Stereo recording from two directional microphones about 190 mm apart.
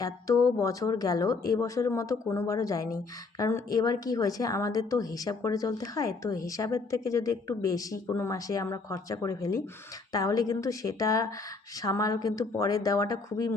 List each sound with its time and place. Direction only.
0.0 s speech: 15° left (ahead or behind)